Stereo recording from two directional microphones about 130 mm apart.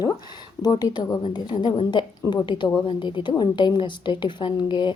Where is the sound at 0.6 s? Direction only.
30° left (ahead or behind).